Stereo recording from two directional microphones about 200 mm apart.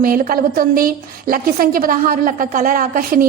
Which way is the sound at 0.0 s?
45° right (ahead or behind).